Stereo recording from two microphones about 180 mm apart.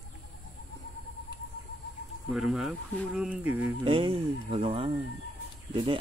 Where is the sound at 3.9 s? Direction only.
30° right (ahead or behind).